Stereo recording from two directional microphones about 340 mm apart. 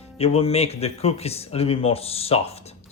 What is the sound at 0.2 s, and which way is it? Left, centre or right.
Speech, centre.